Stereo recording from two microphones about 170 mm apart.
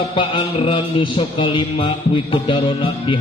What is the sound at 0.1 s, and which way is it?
Music, 30° left (ahead or behind).